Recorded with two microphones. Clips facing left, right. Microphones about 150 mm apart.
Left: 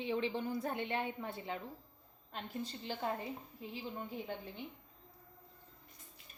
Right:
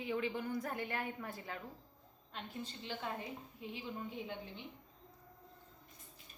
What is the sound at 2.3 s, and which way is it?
Speech, 40° left (ahead or behind).